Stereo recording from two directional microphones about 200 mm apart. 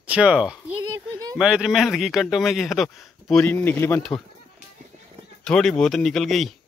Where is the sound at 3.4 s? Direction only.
10° left (ahead or behind).